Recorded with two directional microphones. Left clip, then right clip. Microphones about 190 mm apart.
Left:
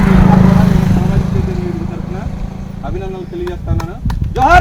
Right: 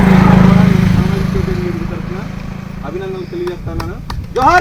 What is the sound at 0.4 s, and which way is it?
Vehicle, 35° left (ahead or behind).